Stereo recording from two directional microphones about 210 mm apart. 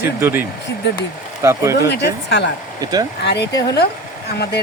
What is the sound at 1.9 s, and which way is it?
Speech, 55° left (ahead or behind).